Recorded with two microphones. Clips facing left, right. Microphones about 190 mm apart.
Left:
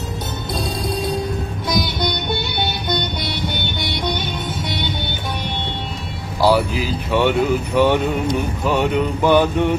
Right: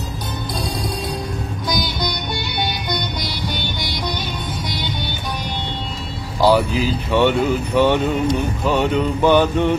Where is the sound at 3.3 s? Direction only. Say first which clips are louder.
Left 1 dB; 60° left (ahead or behind).